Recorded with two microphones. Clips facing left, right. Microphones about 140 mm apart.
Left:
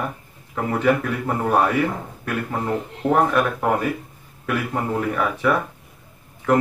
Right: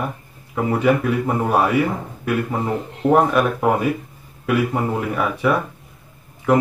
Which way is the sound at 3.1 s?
15° right (ahead or behind).